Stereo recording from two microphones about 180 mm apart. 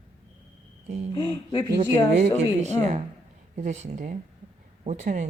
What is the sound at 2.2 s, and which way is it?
Speech, 40° right (ahead or behind).